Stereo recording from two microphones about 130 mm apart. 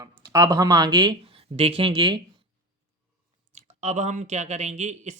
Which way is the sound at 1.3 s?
50° right (ahead or behind).